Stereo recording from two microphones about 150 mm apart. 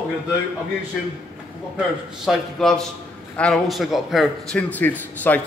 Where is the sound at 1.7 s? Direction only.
Centre (ahead or behind).